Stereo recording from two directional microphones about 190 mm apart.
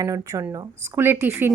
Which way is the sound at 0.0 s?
15° right (ahead or behind).